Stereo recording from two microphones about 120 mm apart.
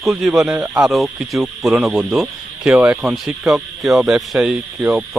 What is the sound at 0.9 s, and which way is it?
Speech, centre (ahead or behind).